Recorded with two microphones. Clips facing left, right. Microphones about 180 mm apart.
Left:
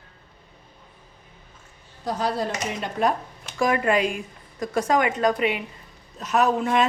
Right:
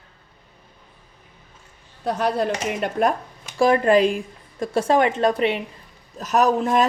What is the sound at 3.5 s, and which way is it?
A woman's voice, 30° right (ahead or behind).